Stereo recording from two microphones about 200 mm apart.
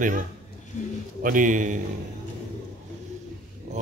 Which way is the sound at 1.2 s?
40° right (ahead or behind).